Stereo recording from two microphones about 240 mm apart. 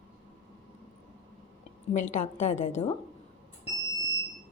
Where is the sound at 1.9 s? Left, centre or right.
Left.